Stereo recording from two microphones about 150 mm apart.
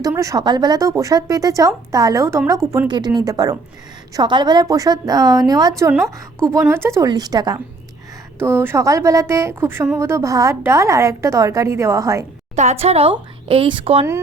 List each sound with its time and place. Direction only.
0.1 s a woman's voice: 20° right (ahead or behind)
12.5 s a woman's voice: 45° right (ahead or behind)